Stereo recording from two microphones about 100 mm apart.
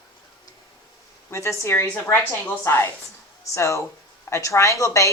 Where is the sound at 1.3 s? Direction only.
30° left (ahead or behind).